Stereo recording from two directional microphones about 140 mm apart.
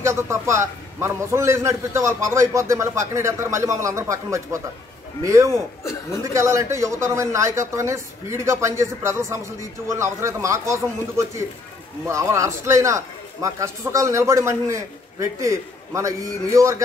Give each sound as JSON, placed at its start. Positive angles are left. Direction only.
{"t": 0.0, "sound": "speech", "side_deg": -20}